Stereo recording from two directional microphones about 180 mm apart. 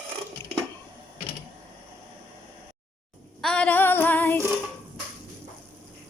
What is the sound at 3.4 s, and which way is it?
Female singing, 5° left (ahead or behind).